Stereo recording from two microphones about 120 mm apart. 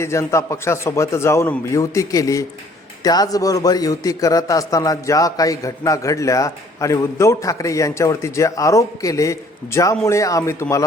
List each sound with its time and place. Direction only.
0.0 s a man's voice: 25° left (ahead or behind)